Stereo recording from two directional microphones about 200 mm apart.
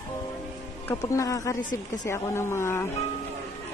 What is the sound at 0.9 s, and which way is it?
A man's voice, 15° left (ahead or behind).